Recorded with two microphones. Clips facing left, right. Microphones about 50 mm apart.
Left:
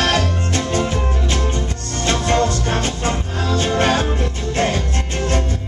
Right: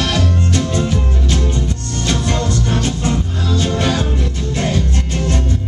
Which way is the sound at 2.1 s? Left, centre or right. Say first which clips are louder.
Left 2 dB; left.